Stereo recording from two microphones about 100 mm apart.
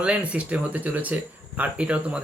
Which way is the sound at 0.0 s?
15° right (ahead or behind).